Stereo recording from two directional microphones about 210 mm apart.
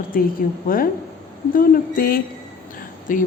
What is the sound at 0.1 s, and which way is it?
A man's voice, 45° left (ahead or behind).